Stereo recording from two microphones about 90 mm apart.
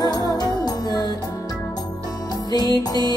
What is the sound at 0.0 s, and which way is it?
Music, 45° left (ahead or behind).